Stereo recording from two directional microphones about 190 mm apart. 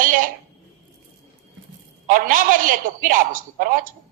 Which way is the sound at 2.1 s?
45° right (ahead or behind).